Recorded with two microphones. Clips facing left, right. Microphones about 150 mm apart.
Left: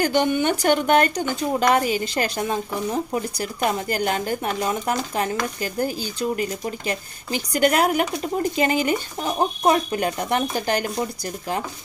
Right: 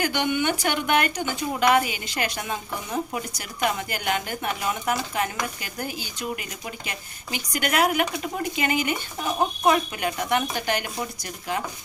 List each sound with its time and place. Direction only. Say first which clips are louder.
0.0 s speech: left 4 dB; 40° left (ahead or behind)